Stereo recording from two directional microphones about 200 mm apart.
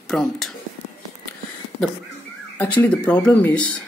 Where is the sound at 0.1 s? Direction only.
Centre (ahead or behind).